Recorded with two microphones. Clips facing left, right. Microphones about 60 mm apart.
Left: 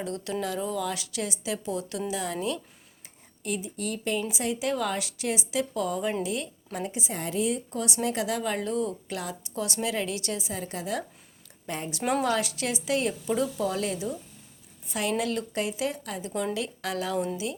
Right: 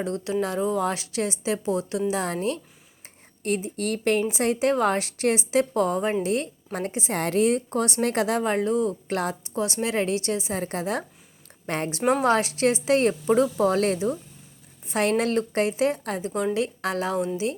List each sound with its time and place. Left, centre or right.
0.0 s speech: right
7.1 s speech: right
9.6 s speech: right
11.6 s speech: right
12.2 s speech: right
15.1 s speech: right